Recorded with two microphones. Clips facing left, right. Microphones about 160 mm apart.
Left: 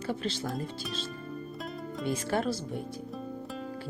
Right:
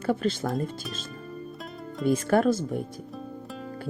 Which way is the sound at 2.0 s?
50° right (ahead or behind).